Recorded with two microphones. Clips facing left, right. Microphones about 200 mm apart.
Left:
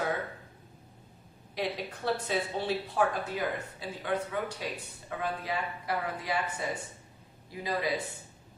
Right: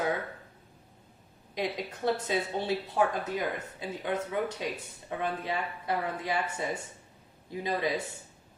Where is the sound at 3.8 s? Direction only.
20° right (ahead or behind).